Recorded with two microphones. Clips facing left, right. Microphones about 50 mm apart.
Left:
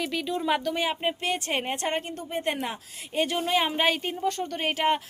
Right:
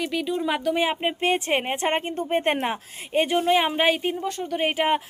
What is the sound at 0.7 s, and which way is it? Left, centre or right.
Speech, centre.